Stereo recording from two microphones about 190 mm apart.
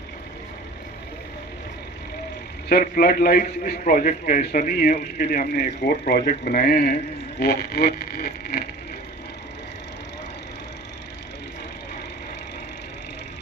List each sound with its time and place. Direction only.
2.6 s a man's voice: 50° left (ahead or behind)